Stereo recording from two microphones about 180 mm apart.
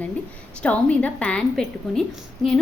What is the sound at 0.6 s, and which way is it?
A woman's voice, 5° left (ahead or behind).